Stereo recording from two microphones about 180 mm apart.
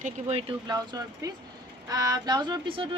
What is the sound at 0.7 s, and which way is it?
Speech, 20° right (ahead or behind).